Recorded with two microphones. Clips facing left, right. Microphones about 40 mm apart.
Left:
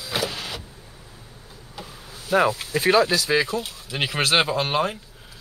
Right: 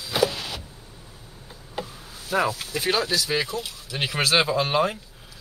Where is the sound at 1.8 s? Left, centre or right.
Right.